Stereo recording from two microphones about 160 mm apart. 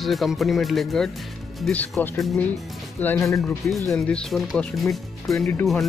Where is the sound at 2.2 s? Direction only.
Centre (ahead or behind).